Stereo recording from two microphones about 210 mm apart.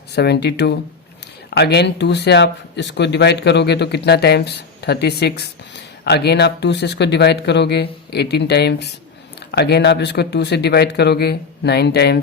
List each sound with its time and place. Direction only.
0.2 s speech: 50° left (ahead or behind)